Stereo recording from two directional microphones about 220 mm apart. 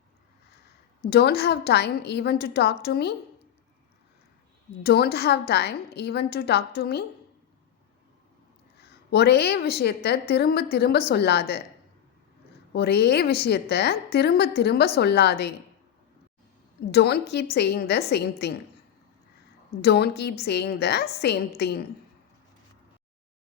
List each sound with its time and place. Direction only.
1.1 s a woman's voice: 45° left (ahead or behind)
4.8 s a woman's voice: 45° left (ahead or behind)
8.8 s a woman's voice: 50° left (ahead or behind)
12.7 s a woman's voice: 50° left (ahead or behind)
16.9 s a woman's voice: 50° left (ahead or behind)
19.8 s a woman's voice: 50° left (ahead or behind)